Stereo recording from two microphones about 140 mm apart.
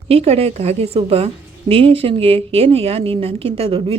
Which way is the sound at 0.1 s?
45° right (ahead or behind).